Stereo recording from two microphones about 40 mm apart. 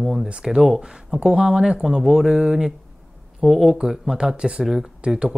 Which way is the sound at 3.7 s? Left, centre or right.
Centre.